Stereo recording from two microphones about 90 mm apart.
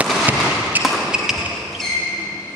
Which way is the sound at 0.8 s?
Centre (ahead or behind).